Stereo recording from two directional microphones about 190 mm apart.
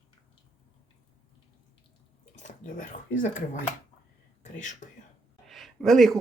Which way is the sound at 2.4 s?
45° left (ahead or behind).